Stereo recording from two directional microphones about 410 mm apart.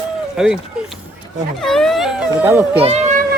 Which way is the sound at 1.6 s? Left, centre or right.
Centre.